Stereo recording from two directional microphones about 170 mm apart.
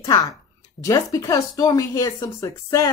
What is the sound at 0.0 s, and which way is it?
A woman's voice, 20° left (ahead or behind).